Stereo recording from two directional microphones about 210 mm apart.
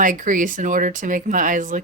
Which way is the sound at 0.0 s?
40° right (ahead or behind).